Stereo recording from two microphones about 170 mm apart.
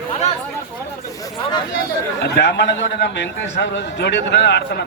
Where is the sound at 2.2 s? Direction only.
85° left.